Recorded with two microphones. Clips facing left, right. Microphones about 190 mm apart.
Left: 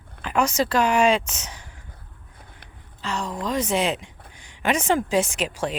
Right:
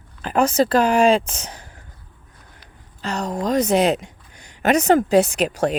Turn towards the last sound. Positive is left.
turn(degrees=-40)  # may be behind; listen again after turning